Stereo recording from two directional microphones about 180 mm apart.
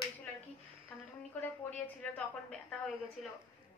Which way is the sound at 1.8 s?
5° left (ahead or behind).